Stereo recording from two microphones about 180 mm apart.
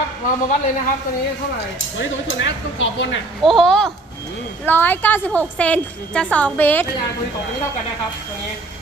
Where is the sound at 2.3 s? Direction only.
90° left.